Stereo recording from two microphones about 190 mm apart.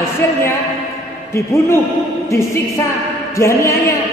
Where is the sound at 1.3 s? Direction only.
15° left (ahead or behind).